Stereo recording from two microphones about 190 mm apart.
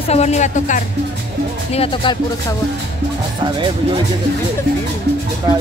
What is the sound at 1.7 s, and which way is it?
Speech, 30° left (ahead or behind).